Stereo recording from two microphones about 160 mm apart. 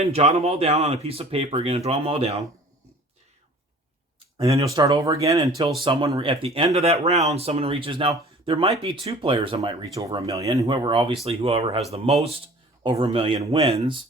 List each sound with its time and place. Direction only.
0.0 s speech: 40° right (ahead or behind)
4.4 s speech: 40° right (ahead or behind)
4.6 s speech: 20° right (ahead or behind)
5.8 s speech: 30° right (ahead or behind)
9.8 s speech: 25° right (ahead or behind); by 13.9 s 40° right (ahead or behind)